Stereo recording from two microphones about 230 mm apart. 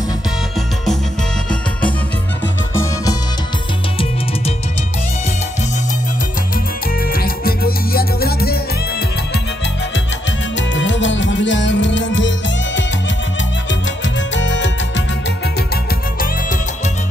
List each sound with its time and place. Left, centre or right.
7.0 s music: left
10.5 s music: left
15.7 s music: left